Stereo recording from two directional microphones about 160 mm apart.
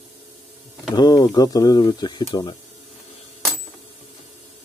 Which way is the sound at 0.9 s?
25° left (ahead or behind).